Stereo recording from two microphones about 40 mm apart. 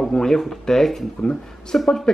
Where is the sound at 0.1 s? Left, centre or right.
Centre.